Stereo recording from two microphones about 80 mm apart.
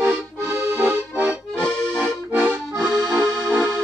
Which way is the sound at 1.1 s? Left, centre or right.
Centre.